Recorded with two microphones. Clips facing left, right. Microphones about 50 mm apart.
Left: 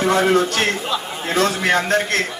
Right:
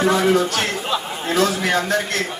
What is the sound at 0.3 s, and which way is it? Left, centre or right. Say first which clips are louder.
A man's voice: left 2 dB; left.